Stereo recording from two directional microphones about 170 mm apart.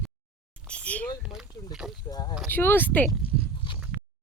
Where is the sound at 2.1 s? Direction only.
20° left (ahead or behind).